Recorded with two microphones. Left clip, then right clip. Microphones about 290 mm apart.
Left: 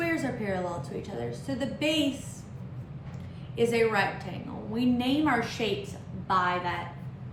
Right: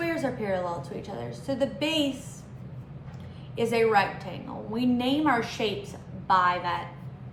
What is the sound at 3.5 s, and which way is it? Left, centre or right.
A woman's voice, centre.